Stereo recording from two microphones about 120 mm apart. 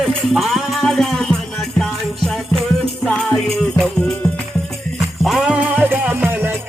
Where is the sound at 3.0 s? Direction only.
5° left (ahead or behind).